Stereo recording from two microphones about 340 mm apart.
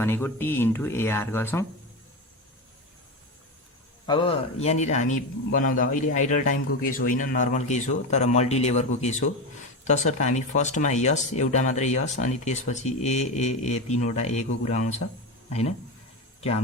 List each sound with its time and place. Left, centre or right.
0.0 s speech: centre
4.0 s a man's voice: centre
16.4 s speech: centre